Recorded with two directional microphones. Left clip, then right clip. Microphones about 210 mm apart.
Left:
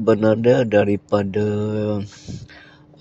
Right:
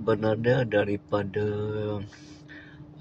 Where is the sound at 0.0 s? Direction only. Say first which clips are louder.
Left 9 dB; 35° left (ahead or behind).